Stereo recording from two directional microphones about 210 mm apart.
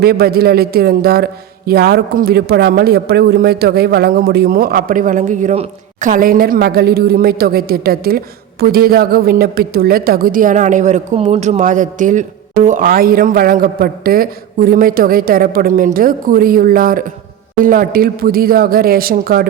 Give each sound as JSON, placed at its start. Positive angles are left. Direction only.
{"t": 0.0, "sound": "a man's voice", "side_deg": -50}